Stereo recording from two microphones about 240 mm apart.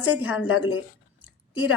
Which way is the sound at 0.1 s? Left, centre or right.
Centre.